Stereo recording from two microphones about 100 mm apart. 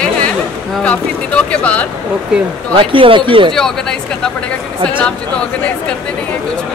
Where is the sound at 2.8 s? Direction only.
60° right (ahead or behind).